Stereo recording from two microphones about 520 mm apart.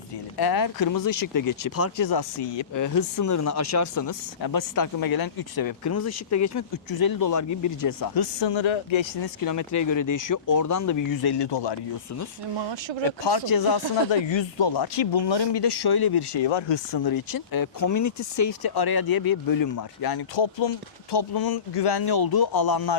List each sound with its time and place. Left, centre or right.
0.3 s speech: left
2.0 s speech: left
2.7 s speech: left
9.2 s speech: left
13.1 s speech: left